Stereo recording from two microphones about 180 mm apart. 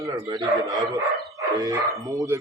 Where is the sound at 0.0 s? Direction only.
20° right (ahead or behind).